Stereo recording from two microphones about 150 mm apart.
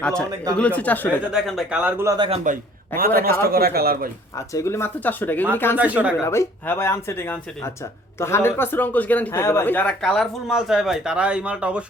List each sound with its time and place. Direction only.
0.0 s speech: 5° left (ahead or behind)
1.3 s speech: centre (ahead or behind)
2.0 s a man's voice: 30° right (ahead or behind)
2.3 s a man's voice: 60° right (ahead or behind); by 3.3 s 75° right (ahead or behind)
3.4 s speech: 90° right
4.4 s speech: 20° left (ahead or behind)
5.7 s speech: 10° right (ahead or behind)
6.1 s speech: 20° left (ahead or behind); by 11.9 s 10° right (ahead or behind)